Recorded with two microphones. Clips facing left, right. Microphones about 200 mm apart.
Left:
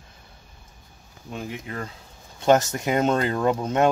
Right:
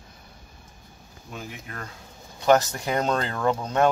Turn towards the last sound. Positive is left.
turn(degrees=20)  # may be behind; listen again after turning